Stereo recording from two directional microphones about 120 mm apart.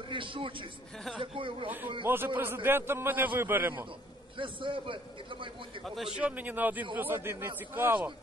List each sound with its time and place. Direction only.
0.1 s a man's voice: 45° right (ahead or behind)
2.0 s a man's voice: 15° right (ahead or behind)
4.4 s a man's voice: 45° right (ahead or behind)
6.1 s a man's voice: 10° right (ahead or behind)